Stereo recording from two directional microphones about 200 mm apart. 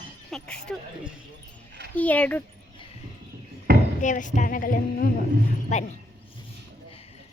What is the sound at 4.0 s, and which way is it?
A woman's voice, 40° left (ahead or behind).